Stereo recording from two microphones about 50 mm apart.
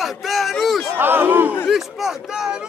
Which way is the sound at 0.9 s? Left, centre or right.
Right.